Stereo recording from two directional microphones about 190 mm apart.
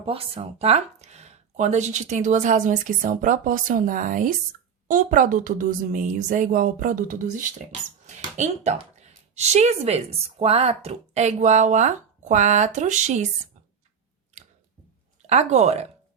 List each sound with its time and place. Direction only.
0.0 s speech: 30° right (ahead or behind)
15.3 s speech: 35° right (ahead or behind)